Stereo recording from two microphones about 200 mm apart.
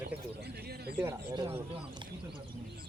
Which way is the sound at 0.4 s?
50° right (ahead or behind).